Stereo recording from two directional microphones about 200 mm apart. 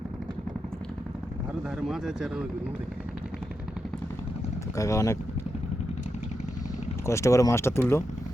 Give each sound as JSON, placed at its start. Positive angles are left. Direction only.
{"t": 1.9, "sound": "speech", "side_deg": 0}
{"t": 4.8, "sound": "speech", "side_deg": 15}
{"t": 7.0, "sound": "speech", "side_deg": 15}